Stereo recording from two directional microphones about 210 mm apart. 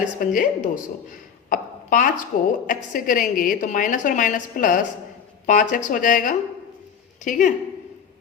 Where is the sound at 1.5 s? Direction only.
40° left (ahead or behind).